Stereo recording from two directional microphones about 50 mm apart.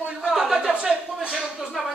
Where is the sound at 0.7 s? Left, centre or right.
Centre.